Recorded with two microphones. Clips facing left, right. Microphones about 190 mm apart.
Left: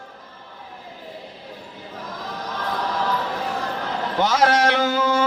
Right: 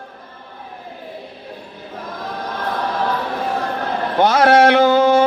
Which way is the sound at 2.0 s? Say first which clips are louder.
Right 5 dB; 60° right (ahead or behind).